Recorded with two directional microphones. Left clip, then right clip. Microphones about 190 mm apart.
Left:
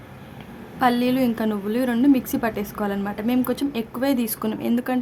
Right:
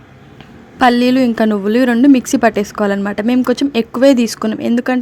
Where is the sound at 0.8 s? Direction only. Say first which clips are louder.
Right 9 dB; 30° right (ahead or behind).